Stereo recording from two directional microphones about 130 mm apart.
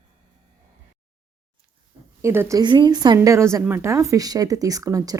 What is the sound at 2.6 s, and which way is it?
Speech, 35° right (ahead or behind).